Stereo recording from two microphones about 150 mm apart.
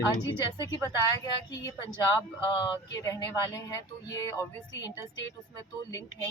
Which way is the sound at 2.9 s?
20° left (ahead or behind).